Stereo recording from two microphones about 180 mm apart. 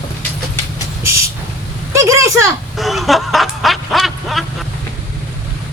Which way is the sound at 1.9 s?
15° right (ahead or behind).